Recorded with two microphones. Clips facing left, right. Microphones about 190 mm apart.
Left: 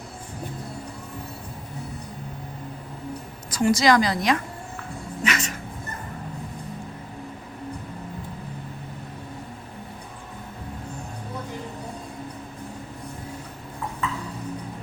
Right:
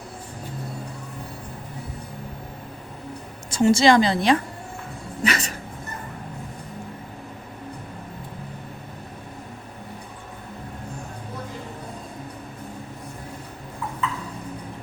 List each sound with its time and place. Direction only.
3.5 s a woman's voice: 25° right (ahead or behind)
5.2 s dog: 35° right (ahead or behind)